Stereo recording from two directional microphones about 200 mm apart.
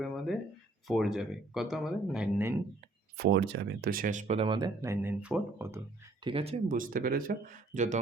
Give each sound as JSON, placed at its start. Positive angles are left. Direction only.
{"t": 0.9, "sound": "speech", "side_deg": 0}
{"t": 3.2, "sound": "speech", "side_deg": -55}
{"t": 6.2, "sound": "speech", "side_deg": -30}
{"t": 6.7, "sound": "speech", "side_deg": -45}